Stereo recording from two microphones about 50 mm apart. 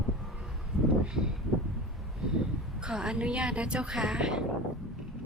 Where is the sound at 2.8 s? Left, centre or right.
Centre.